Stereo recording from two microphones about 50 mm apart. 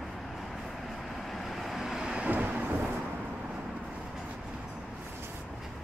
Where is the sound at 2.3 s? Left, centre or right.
Right.